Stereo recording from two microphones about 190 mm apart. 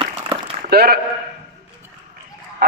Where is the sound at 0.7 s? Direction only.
55° right (ahead or behind).